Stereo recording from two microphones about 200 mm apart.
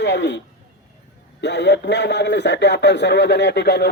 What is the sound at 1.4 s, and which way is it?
Speech, 60° left (ahead or behind).